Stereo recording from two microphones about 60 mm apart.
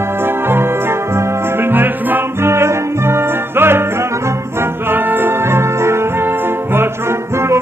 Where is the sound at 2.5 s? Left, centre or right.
Right.